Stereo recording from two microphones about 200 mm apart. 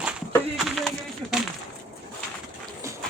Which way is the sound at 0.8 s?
Centre (ahead or behind).